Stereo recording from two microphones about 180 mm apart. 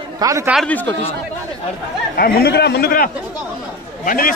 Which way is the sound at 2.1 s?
60° left (ahead or behind).